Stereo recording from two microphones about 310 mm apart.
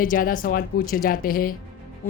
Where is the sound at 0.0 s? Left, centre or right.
Left.